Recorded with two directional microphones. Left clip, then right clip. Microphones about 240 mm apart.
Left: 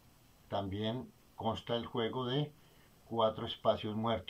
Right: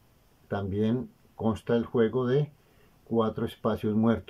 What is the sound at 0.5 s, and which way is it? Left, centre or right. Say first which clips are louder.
Speech: right 7 dB; right.